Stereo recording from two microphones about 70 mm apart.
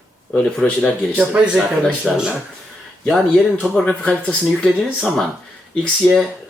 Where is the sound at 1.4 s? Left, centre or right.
Centre.